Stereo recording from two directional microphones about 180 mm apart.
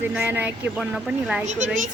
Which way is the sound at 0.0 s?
10° right (ahead or behind).